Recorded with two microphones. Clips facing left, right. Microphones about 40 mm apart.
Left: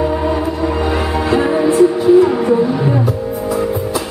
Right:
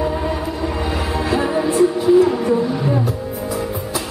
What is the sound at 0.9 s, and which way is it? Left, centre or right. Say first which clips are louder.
Music: left 5 dB; centre.